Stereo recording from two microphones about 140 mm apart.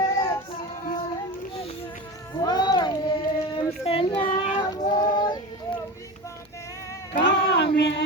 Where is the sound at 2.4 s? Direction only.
30° left (ahead or behind).